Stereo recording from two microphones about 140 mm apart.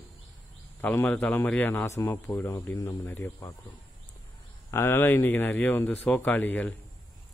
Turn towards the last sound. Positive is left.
turn(degrees=10)  # may be behind; listen again after turning